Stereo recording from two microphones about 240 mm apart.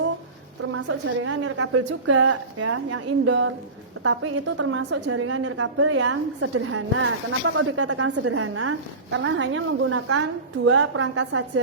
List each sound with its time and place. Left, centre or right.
0.7 s a woman's voice: right